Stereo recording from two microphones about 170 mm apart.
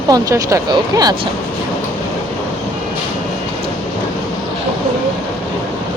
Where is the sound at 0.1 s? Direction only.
20° right (ahead or behind).